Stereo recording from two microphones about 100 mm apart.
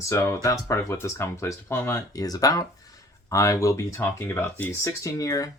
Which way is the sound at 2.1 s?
35° left (ahead or behind).